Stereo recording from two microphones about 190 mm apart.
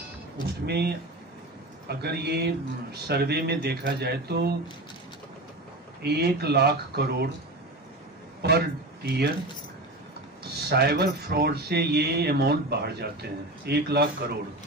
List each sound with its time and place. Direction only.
0.7 s speech: 60° right (ahead or behind)
6.0 s speech: 60° right (ahead or behind)
8.4 s speech: 60° right (ahead or behind)
10.4 s speech: 60° right (ahead or behind)